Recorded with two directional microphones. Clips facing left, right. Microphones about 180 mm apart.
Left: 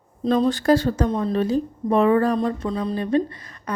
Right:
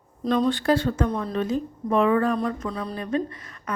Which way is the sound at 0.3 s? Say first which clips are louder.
Left 3 dB; 35° left (ahead or behind).